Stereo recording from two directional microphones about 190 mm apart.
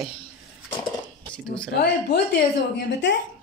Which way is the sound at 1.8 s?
60° left (ahead or behind).